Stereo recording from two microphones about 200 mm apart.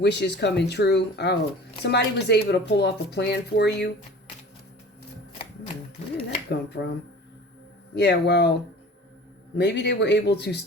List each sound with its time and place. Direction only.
0.0 s speech: 60° left (ahead or behind)
6.5 s speech: 55° left (ahead or behind)
7.9 s speech: 55° left (ahead or behind)
9.6 s speech: 55° left (ahead or behind)